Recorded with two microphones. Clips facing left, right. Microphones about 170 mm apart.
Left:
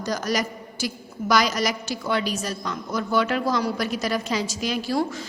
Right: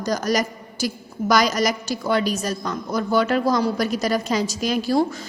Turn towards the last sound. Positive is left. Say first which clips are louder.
# right 4 dB
turn(degrees=-40)  # may be behind; listen again after turning